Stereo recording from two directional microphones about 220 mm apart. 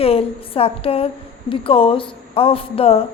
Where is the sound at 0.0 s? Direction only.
25° left (ahead or behind).